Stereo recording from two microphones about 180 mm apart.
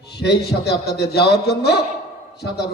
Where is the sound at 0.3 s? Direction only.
65° left (ahead or behind).